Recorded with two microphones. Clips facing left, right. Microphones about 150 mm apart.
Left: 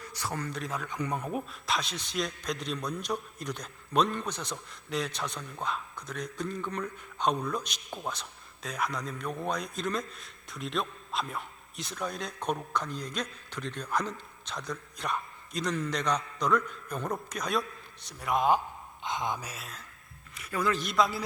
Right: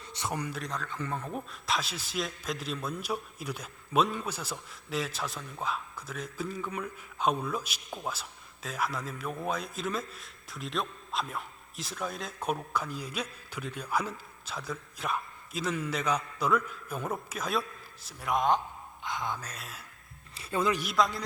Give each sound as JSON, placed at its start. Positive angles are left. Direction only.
{"t": 0.0, "sound": "speech", "side_deg": -25}
{"t": 0.5, "sound": "a man's voice", "side_deg": 0}
{"t": 0.8, "sound": "a man's voice", "side_deg": 15}
{"t": 19.0, "sound": "mantra", "side_deg": 20}
{"t": 20.3, "sound": "a sound", "side_deg": -25}
{"t": 20.7, "sound": "a man's voice", "side_deg": 0}